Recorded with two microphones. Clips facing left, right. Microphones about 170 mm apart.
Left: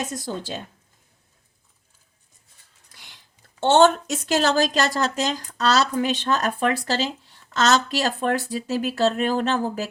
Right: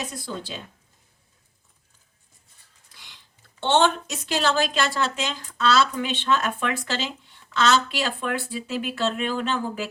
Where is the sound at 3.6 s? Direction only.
45° left (ahead or behind).